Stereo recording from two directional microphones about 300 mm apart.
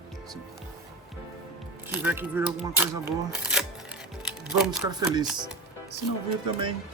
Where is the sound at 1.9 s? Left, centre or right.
Centre.